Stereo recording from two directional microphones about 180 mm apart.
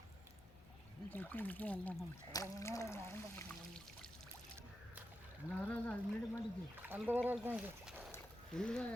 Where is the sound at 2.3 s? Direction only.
15° left (ahead or behind).